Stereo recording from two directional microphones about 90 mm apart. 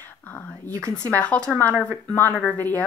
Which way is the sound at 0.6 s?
10° left (ahead or behind).